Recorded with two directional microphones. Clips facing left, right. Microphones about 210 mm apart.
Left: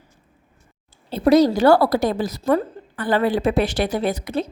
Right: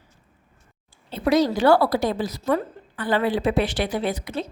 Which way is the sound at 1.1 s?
40° left (ahead or behind).